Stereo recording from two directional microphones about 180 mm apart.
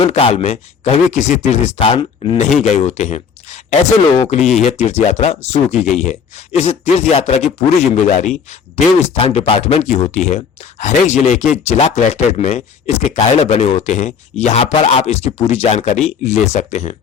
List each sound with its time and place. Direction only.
0.0 s speech: 35° left (ahead or behind)